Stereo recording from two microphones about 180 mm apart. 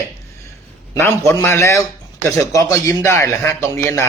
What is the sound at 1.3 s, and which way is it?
Speech, 15° left (ahead or behind).